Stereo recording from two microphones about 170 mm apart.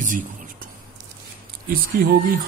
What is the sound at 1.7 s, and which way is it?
Speech, 60° right (ahead or behind).